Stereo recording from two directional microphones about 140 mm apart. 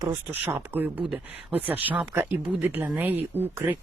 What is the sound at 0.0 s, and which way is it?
Speech, 15° right (ahead or behind).